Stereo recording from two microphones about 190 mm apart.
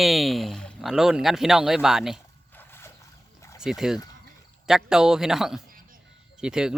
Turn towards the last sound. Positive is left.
turn(degrees=-5)  # may be behind; listen again after turning